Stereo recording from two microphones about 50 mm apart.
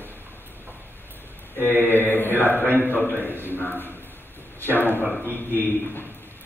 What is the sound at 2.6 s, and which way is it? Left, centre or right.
Speech, right.